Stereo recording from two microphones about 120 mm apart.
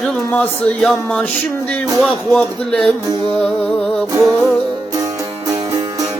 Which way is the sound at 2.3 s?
5° left (ahead or behind).